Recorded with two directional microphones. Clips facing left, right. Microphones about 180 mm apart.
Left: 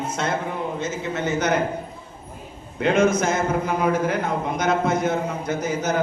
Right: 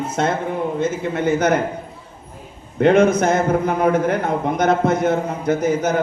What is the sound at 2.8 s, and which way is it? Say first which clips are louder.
A man's voice: right 5 dB; 55° right (ahead or behind).